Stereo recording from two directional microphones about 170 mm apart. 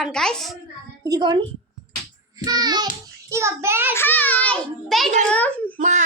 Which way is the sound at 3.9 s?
10° left (ahead or behind).